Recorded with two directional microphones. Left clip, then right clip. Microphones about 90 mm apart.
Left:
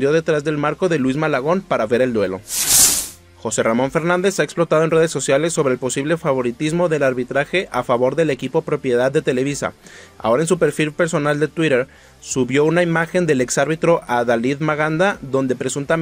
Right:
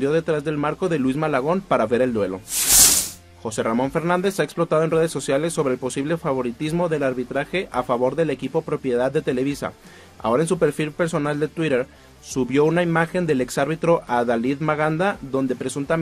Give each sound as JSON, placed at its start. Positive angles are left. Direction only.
{"t": 0.0, "sound": "a man's voice", "side_deg": 25}
{"t": 2.5, "sound": "snake", "side_deg": 0}
{"t": 3.4, "sound": "speech", "side_deg": 30}